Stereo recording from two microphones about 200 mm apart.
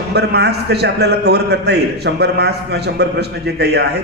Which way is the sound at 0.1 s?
55° right (ahead or behind).